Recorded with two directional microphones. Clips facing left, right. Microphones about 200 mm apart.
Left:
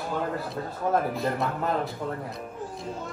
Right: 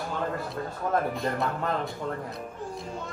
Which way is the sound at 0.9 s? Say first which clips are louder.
Left 1 dB; centre (ahead or behind).